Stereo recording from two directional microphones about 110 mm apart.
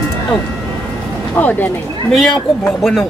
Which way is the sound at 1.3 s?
15° left (ahead or behind).